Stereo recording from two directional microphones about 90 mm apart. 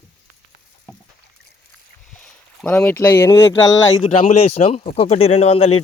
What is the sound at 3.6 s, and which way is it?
Speech, 40° left (ahead or behind).